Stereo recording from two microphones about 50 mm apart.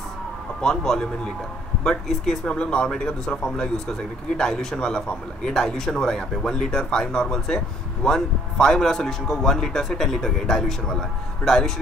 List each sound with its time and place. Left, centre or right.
0.6 s speech: centre